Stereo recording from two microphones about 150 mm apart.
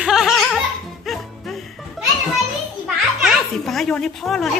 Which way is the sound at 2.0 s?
Centre (ahead or behind).